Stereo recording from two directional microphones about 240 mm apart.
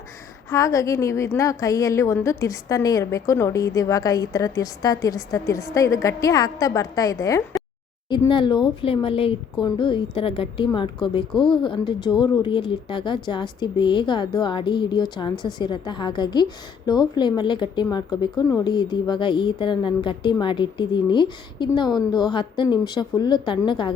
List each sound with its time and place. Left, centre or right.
0.5 s a woman's voice: centre